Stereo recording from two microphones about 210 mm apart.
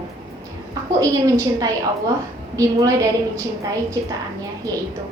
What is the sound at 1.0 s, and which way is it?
A woman's voice, 15° right (ahead or behind).